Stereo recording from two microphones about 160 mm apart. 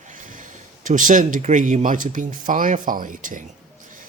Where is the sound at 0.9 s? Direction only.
55° right (ahead or behind).